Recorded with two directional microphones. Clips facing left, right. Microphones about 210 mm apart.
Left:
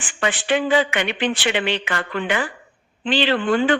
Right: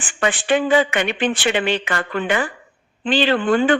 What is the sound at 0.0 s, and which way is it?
Speech, 50° right (ahead or behind).